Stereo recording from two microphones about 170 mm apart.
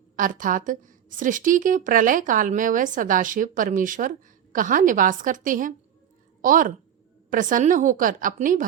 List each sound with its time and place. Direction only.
0.2 s a woman's voice: 50° right (ahead or behind)